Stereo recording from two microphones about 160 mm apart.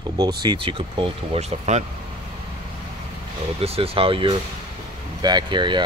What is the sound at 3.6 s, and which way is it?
Speech, 35° right (ahead or behind).